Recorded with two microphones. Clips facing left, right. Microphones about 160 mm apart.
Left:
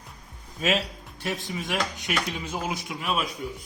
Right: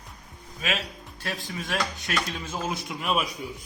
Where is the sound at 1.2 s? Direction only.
20° left (ahead or behind); by 3.2 s centre (ahead or behind).